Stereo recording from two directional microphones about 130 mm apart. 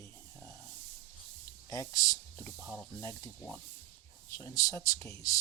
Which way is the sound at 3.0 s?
25° left (ahead or behind).